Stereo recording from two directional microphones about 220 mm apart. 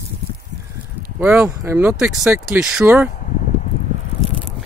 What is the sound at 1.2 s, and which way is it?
Speech, 5° right (ahead or behind).